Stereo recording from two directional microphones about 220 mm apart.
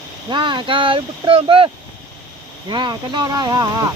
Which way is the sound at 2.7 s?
20° right (ahead or behind).